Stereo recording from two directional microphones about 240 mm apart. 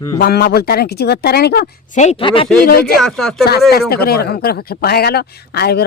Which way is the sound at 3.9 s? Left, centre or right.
Left.